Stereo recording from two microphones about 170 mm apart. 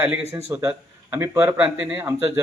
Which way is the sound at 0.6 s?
15° right (ahead or behind).